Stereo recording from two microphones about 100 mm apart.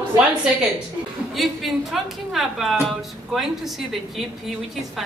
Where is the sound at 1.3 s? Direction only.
Centre (ahead or behind).